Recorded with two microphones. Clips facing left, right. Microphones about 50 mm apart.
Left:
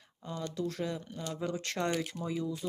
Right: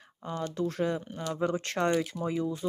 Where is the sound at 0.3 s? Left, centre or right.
Right.